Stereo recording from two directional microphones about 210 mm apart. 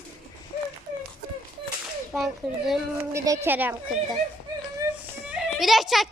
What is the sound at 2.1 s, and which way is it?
Speech, centre (ahead or behind).